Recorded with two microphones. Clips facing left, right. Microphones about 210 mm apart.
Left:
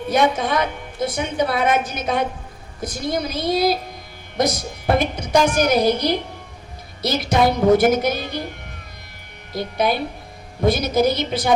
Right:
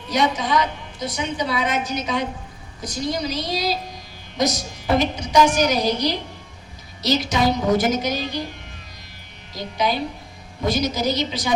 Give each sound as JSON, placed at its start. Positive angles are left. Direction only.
{"t": 0.1, "sound": "a woman's voice", "side_deg": 55}
{"t": 9.5, "sound": "a woman's voice", "side_deg": 55}